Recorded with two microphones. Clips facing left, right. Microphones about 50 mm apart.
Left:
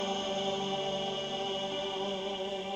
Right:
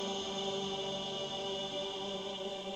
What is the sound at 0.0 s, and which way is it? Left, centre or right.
Chant, left.